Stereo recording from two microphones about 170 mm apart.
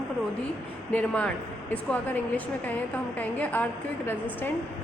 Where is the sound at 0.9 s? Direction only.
5° left (ahead or behind).